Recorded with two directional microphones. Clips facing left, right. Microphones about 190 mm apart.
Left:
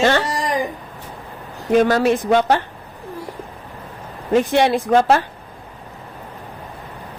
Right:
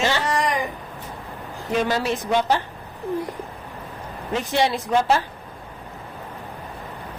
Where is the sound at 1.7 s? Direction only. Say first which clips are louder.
Left 8 dB; 50° left (ahead or behind).